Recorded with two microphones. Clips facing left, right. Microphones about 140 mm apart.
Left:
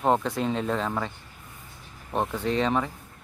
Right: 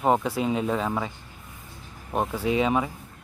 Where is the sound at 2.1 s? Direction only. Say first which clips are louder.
Right 2 dB; 10° right (ahead or behind).